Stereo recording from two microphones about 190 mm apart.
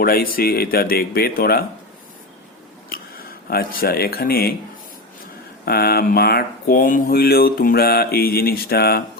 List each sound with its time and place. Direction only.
0.0 s speech: 50° left (ahead or behind)
3.5 s speech: 50° left (ahead or behind)
5.6 s speech: 55° left (ahead or behind)